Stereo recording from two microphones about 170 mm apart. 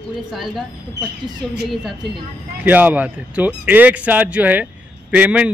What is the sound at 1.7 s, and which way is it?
A man's voice, centre (ahead or behind).